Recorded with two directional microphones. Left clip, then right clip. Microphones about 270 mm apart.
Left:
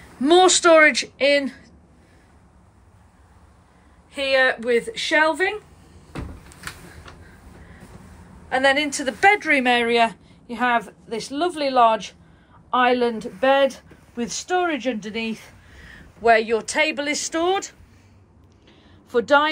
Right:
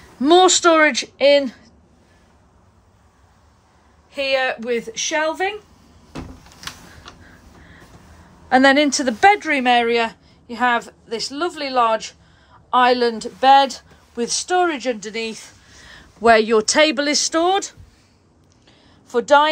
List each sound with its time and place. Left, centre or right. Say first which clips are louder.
0.2 s speech: right 2 dB; centre
4.1 s speech: left 1 dB; centre
8.5 s speech: right 5 dB; right; by 15.5 s centre
16.2 s speech: right 4 dB; right
18.7 s a sound: even; centre